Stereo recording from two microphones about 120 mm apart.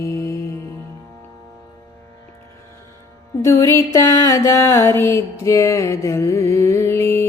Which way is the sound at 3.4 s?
25° left (ahead or behind).